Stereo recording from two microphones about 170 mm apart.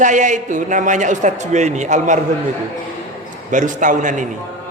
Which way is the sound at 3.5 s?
50° right (ahead or behind).